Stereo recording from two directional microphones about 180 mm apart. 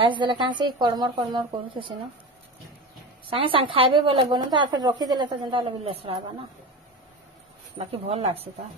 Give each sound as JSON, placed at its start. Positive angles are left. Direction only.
{"t": 0.0, "sound": "a woman's voice", "side_deg": -25}
{"t": 3.3, "sound": "a woman's voice", "side_deg": -30}
{"t": 7.7, "sound": "speech", "side_deg": -35}